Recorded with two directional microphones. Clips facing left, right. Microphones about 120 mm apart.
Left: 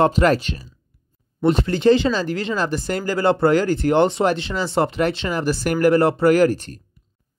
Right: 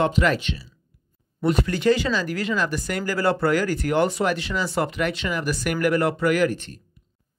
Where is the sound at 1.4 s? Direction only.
30° left (ahead or behind).